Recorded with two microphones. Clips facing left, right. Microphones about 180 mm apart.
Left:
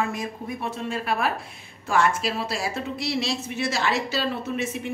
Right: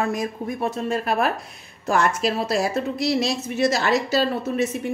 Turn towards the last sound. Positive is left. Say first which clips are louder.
# right 5 dB
turn(degrees=-40)  # may be behind; listen again after turning